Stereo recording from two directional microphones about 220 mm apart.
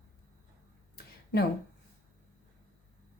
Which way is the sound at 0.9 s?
45° left (ahead or behind).